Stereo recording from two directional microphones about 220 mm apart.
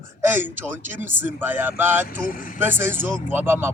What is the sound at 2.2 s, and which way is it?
Speech, 40° left (ahead or behind).